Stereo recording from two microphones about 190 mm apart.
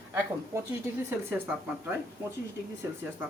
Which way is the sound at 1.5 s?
10° right (ahead or behind).